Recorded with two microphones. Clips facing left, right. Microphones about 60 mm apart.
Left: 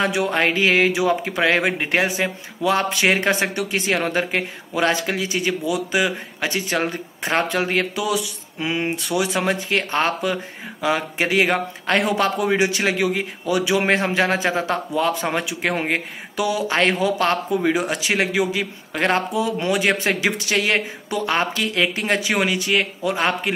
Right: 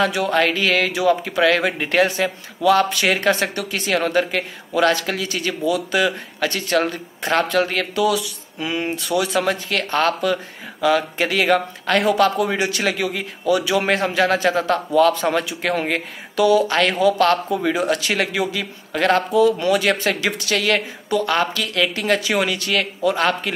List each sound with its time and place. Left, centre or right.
0.0 s speech: left